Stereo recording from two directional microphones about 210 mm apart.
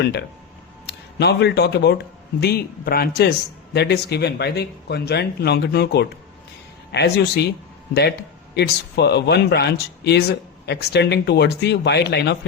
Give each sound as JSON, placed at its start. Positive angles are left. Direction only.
{"t": 0.0, "sound": "speech", "side_deg": 55}
{"t": 8.5, "sound": "speech", "side_deg": 50}